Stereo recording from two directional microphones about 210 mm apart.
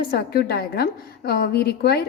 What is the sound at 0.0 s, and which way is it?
A woman's voice, 45° left (ahead or behind).